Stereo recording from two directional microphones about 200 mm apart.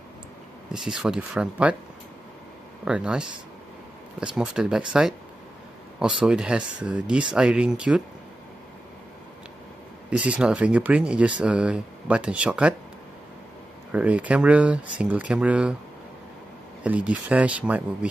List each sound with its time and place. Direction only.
0.7 s speech: centre (ahead or behind)
2.8 s speech: 5° right (ahead or behind)
4.4 s speech: 5° right (ahead or behind)
10.0 s speech: 5° right (ahead or behind)
13.9 s speech: 5° right (ahead or behind)
16.8 s speech: 5° right (ahead or behind)